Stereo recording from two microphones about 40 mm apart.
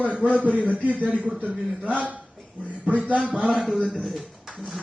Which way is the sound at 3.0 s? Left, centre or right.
Right.